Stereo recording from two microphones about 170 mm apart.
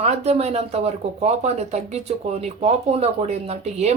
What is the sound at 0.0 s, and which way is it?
Speech, 40° right (ahead or behind).